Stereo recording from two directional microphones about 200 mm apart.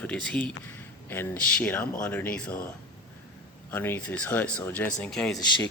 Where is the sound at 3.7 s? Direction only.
10° left (ahead or behind).